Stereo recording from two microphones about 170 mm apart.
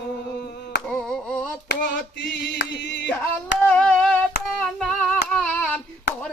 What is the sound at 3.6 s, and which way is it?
Singing, 5° left (ahead or behind).